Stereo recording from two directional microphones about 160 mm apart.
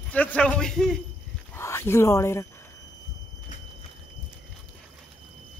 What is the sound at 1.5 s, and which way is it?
Speech, 15° left (ahead or behind).